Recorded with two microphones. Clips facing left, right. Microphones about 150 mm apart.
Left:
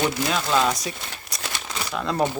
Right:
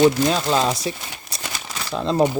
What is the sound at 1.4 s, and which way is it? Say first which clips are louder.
Crumpling: even; 5° right (ahead or behind).